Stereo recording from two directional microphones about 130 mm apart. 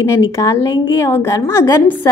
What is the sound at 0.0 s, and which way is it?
A woman's voice, 25° left (ahead or behind).